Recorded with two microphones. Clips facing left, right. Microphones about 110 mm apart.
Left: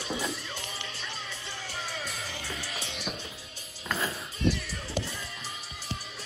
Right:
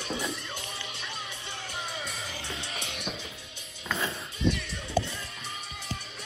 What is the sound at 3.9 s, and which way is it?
Music, centre (ahead or behind).